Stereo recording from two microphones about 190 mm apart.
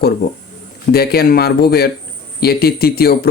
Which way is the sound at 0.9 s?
55° left (ahead or behind).